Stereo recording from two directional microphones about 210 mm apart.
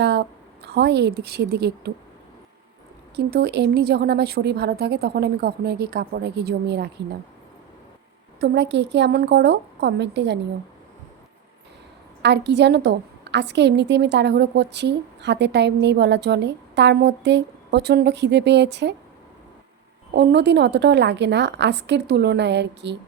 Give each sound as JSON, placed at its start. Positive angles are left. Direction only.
{"t": 0.0, "sound": "a woman's voice", "side_deg": -55}
{"t": 3.2, "sound": "speech", "side_deg": -50}
{"t": 8.4, "sound": "a woman's voice", "side_deg": -55}
{"t": 12.2, "sound": "a woman's voice", "side_deg": -55}
{"t": 20.1, "sound": "a woman's voice", "side_deg": -55}